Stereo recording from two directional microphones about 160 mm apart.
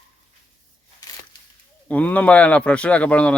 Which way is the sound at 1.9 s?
10° left (ahead or behind).